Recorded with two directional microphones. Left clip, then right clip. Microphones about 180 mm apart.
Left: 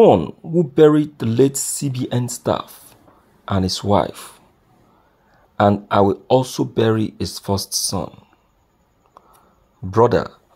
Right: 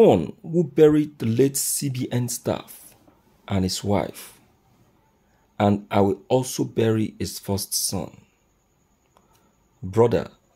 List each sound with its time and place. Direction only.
0.0 s speech: 5° right (ahead or behind)
5.6 s speech: 5° left (ahead or behind)
9.8 s speech: 5° left (ahead or behind)